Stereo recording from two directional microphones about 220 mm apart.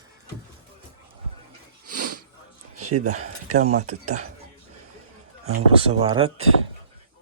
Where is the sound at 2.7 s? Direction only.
90° right.